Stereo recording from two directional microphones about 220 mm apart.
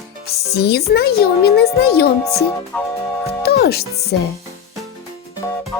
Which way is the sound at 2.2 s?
15° left (ahead or behind).